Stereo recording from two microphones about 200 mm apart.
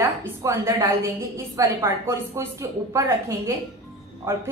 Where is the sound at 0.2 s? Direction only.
15° right (ahead or behind).